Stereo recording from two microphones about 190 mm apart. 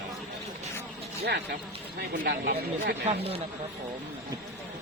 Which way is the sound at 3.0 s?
30° right (ahead or behind).